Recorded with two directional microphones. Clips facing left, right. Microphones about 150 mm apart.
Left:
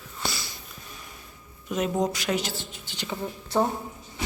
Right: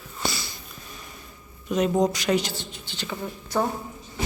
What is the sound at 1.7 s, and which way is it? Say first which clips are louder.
A woman's voice: right 4 dB; 5° left (ahead or behind).